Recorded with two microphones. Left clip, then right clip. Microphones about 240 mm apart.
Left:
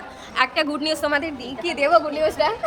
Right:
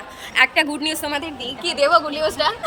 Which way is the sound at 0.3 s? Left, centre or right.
Centre.